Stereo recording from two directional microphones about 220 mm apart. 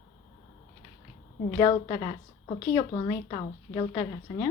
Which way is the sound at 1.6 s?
20° left (ahead or behind).